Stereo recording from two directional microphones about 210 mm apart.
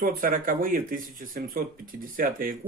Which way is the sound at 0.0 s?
40° right (ahead or behind).